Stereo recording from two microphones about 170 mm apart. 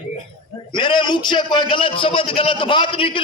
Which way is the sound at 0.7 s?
30° left (ahead or behind).